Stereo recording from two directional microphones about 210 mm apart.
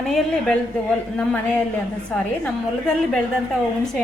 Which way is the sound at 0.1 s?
5° left (ahead or behind).